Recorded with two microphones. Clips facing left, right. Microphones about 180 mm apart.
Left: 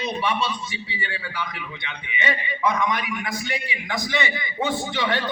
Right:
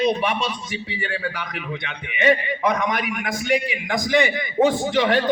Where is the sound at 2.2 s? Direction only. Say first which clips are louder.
Right 6 dB; 45° right (ahead or behind).